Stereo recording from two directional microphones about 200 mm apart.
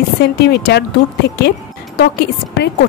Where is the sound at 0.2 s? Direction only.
55° left (ahead or behind).